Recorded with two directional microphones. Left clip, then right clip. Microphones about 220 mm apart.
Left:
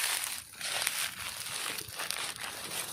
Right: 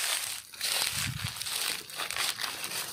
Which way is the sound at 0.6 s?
45° right (ahead or behind).